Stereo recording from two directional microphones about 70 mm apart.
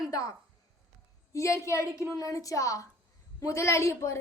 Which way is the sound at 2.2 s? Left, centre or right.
Left.